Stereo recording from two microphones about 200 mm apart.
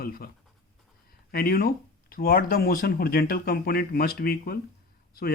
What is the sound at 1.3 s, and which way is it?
Speech, 50° left (ahead or behind).